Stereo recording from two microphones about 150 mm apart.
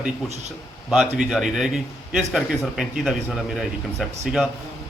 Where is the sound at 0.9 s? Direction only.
5° right (ahead or behind).